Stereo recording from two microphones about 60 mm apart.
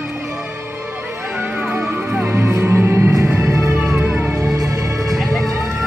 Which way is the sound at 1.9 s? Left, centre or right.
Right.